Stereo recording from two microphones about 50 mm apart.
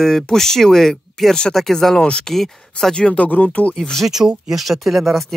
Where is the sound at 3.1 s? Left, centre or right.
Left.